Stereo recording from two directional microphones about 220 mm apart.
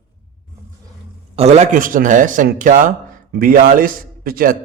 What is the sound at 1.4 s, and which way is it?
A man's voice, 30° right (ahead or behind).